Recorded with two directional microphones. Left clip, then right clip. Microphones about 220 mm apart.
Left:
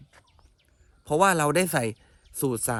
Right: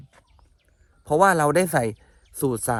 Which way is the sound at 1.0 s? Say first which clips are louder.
Right 4 dB; 15° right (ahead or behind).